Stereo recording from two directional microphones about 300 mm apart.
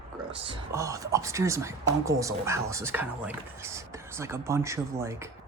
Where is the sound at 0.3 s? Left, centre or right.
Centre.